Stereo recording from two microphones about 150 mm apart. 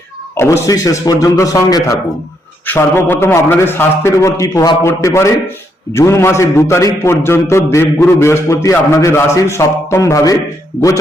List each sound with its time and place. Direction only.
0.3 s a man's voice: 20° left (ahead or behind)